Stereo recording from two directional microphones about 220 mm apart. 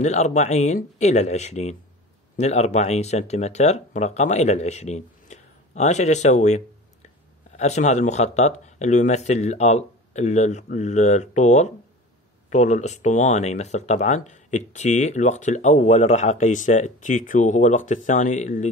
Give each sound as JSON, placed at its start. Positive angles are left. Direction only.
{"t": 0.0, "sound": "speech", "side_deg": 30}